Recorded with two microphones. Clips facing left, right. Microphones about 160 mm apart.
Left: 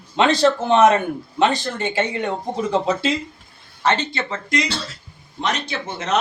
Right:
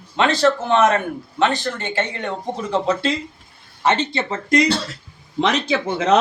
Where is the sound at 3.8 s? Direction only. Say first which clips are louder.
Right 1 dB; 20° right (ahead or behind).